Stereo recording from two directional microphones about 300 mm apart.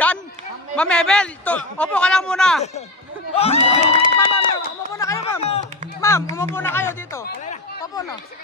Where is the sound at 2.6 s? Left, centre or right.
Left.